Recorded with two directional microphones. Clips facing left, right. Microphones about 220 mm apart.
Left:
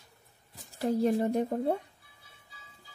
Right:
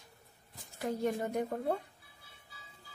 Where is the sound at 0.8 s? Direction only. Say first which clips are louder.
Left 7 dB; 35° left (ahead or behind).